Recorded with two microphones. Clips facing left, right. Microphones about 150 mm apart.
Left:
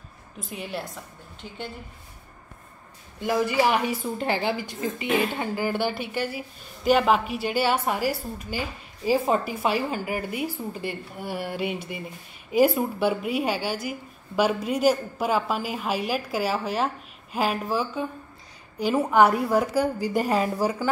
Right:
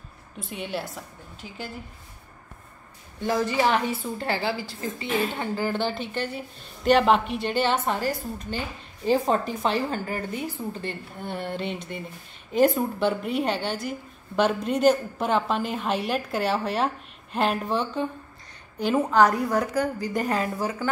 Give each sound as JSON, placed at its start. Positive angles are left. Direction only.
{"t": 0.4, "sound": "a woman's voice", "side_deg": 0}
{"t": 3.3, "sound": "a woman's voice", "side_deg": 10}